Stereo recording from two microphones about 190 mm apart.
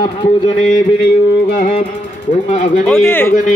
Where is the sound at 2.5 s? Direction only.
40° left (ahead or behind).